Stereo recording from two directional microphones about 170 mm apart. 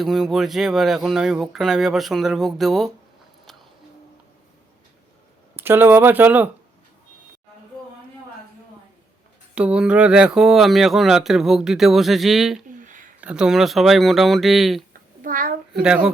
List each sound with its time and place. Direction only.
0.0 s speech: centre (ahead or behind)
5.5 s speech: 10° right (ahead or behind)
9.6 s speech: 5° right (ahead or behind)
12.6 s a sound: 50° right (ahead or behind)
13.2 s speech: 5° right (ahead or behind)
15.2 s a sound: 55° right (ahead or behind)
15.7 s speech: 5° right (ahead or behind)